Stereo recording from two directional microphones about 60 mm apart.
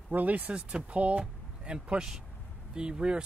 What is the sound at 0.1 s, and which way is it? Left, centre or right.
Speech, right.